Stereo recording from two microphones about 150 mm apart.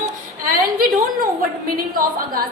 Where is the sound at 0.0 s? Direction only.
70° right (ahead or behind).